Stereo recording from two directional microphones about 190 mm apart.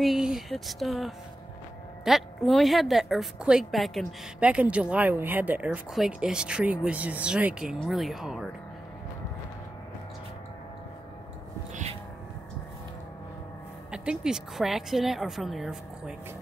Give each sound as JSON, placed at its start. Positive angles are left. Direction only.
{"t": 0.0, "sound": "a woman's voice", "side_deg": 0}
{"t": 11.7, "sound": "a sound", "side_deg": -35}
{"t": 13.9, "sound": "a woman's voice", "side_deg": -5}